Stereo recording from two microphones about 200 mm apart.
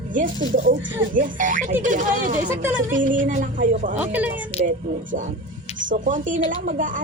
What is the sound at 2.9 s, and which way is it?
A woman's voice, 40° right (ahead or behind).